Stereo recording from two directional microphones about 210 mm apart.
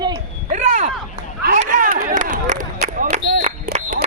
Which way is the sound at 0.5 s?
35° right (ahead or behind).